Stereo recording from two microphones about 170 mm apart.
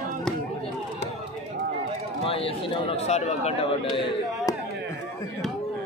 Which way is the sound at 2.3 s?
35° left (ahead or behind).